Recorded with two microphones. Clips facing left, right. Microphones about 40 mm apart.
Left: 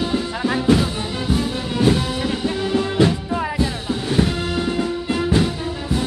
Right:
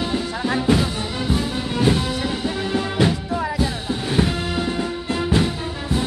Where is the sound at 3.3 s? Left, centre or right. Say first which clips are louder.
Left 1 dB; centre.